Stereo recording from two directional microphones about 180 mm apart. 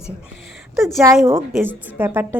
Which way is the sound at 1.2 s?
10° right (ahead or behind).